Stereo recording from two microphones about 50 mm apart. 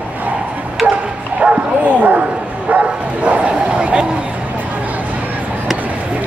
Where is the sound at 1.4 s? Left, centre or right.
Right.